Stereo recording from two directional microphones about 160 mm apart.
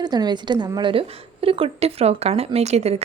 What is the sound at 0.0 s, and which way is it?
A woman's voice, 25° right (ahead or behind).